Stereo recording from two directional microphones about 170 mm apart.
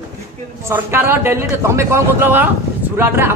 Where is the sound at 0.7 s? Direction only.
15° right (ahead or behind).